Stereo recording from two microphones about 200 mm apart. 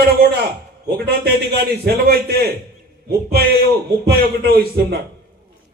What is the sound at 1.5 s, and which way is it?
Speech, 50° right (ahead or behind).